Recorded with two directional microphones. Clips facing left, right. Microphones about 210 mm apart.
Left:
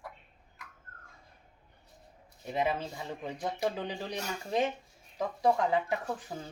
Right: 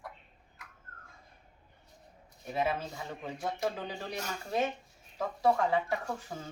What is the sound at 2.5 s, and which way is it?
A man's voice, 15° left (ahead or behind).